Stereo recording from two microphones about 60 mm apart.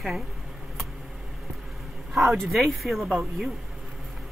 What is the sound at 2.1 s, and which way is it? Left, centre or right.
Speech, centre.